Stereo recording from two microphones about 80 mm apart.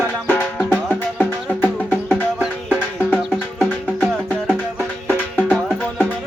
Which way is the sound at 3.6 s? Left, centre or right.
Centre.